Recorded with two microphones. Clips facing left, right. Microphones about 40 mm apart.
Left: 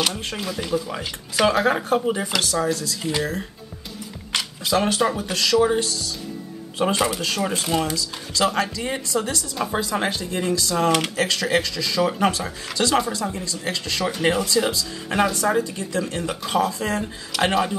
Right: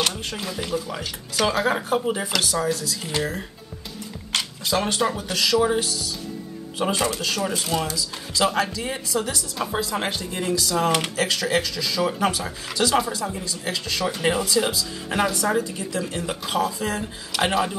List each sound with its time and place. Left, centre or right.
0.4 s speech: centre
1.0 s speech: left
1.5 s speech: centre
4.3 s music: centre
4.8 s speech: centre
7.0 s speech: centre
8.4 s speech: centre